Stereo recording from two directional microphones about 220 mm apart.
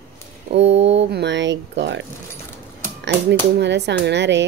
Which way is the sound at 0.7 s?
55° right (ahead or behind).